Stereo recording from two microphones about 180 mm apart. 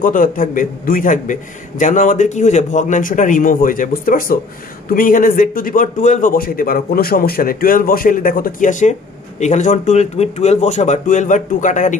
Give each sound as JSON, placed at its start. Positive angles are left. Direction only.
{"t": 0.0, "sound": "a man's voice", "side_deg": 50}